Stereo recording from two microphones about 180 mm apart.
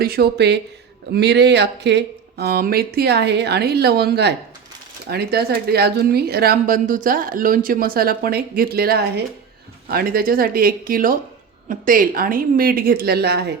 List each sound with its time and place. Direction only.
0.0 s a woman's voice: 60° right (ahead or behind)